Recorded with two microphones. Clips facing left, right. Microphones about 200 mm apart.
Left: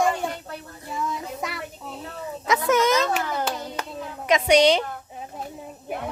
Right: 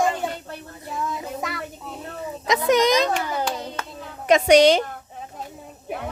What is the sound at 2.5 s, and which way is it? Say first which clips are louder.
Speech: right 2 dB; 15° right (ahead or behind).